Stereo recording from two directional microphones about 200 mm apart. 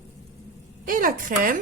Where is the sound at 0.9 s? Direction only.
45° right (ahead or behind).